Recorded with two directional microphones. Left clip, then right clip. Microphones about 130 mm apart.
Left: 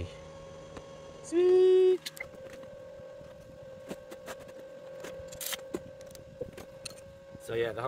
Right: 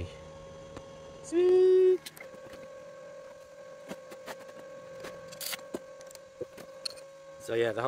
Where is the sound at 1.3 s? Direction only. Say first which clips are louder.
Even; centre (ahead or behind).